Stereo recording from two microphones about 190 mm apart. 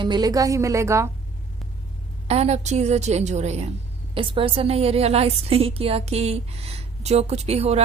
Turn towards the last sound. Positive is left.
turn(degrees=-35)  # may be behind; listen again after turning